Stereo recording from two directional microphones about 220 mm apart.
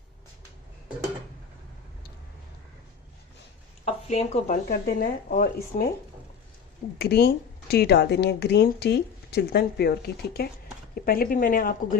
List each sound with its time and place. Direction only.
3.8 s speech: 30° left (ahead or behind)
4.7 s speech: 45° left (ahead or behind)
7.0 s speech: 45° left (ahead or behind)